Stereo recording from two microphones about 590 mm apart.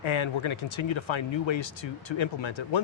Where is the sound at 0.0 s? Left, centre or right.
Left.